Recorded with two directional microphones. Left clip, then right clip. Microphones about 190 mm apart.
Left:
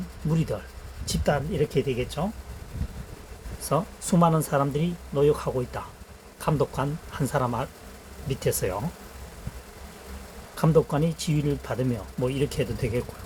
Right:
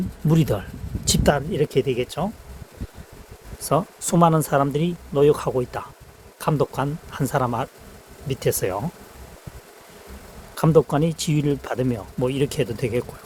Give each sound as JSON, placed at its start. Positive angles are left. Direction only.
{"t": 0.3, "sound": "speech", "side_deg": -60}
{"t": 3.6, "sound": "speech", "side_deg": -65}
{"t": 6.4, "sound": "speech", "side_deg": -50}
{"t": 10.5, "sound": "speech", "side_deg": -65}